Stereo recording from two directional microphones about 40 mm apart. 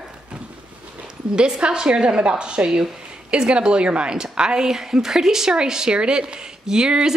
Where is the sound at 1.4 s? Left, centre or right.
Right.